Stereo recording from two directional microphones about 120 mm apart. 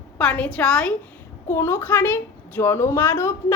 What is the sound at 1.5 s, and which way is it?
A woman's voice, 20° left (ahead or behind).